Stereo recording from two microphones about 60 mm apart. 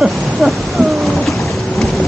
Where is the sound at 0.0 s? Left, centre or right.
Centre.